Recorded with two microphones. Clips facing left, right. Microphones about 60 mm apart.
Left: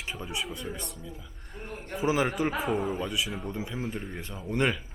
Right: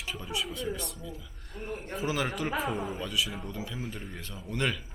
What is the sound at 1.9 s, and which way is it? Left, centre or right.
Speech, left.